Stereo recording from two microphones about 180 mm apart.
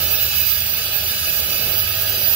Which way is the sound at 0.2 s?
10° right (ahead or behind).